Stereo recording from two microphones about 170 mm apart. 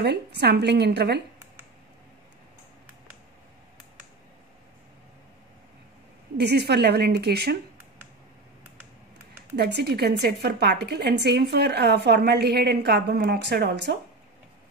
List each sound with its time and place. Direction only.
0.0 s a woman's voice: 75° right (ahead or behind)
6.3 s a woman's voice: 75° right (ahead or behind)
9.6 s a woman's voice: 75° right (ahead or behind)